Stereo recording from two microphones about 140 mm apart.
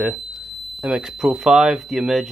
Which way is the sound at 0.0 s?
10° right (ahead or behind).